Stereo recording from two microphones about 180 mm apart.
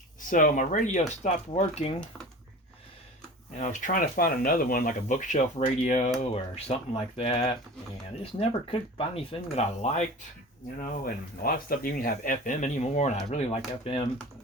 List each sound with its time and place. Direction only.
0.3 s speech: 45° left (ahead or behind)
3.5 s speech: 40° left (ahead or behind)
10.8 s speech: 55° left (ahead or behind); by 13.6 s 35° left (ahead or behind)